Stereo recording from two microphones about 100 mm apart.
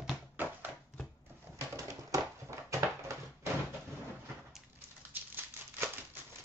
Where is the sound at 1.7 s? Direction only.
30° right (ahead or behind).